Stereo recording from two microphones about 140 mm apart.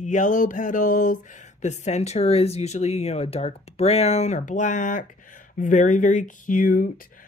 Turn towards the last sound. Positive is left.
turn(degrees=85)